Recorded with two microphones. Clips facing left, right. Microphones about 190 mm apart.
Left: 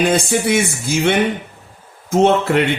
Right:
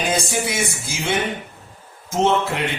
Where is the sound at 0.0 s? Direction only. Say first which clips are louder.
Left 6 dB; 60° left (ahead or behind).